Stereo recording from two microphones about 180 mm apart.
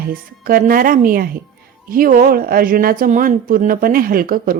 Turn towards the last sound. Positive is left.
turn(degrees=-50)  # may be behind; listen again after turning